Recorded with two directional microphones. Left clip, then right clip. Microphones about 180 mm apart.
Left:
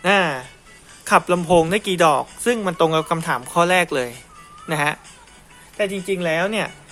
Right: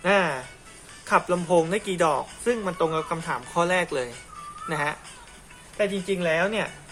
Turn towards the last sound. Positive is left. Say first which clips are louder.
# left 3 dB
turn(degrees=55)  # may be behind; listen again after turning